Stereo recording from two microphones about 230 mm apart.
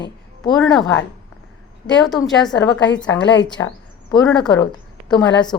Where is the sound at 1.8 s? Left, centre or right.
Centre.